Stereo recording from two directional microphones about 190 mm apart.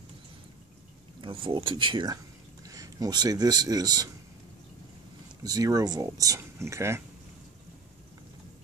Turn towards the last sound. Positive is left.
turn(degrees=-15)  # may be behind; listen again after turning